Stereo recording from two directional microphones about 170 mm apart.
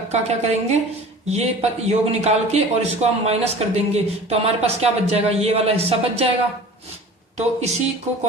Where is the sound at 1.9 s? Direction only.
40° right (ahead or behind).